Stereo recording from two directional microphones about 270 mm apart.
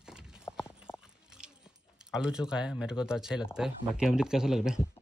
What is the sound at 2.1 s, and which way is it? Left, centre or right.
Speech, centre.